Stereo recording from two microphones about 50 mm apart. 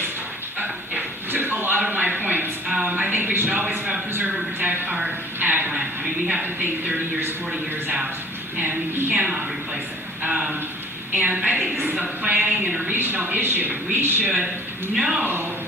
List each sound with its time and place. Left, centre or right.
0.6 s dog: right
1.9 s a sound: right
5.7 s a sound: centre
6.3 s speech: right
8.5 s a sound: right
9.1 s speech: right
11.1 s a woman's voice: right
11.3 s a woman's voice: right
11.8 s a sound: right
12.9 s speech: right
14.9 s speech: centre
15.2 s speech: right